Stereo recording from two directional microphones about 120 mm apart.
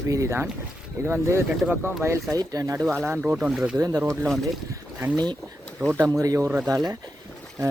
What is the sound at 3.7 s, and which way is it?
Speech, 30° right (ahead or behind).